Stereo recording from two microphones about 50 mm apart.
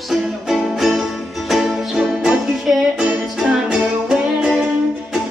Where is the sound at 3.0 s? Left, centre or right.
Centre.